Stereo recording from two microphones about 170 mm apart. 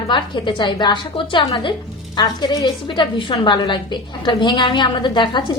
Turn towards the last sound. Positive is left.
turn(degrees=25)  # may be behind; listen again after turning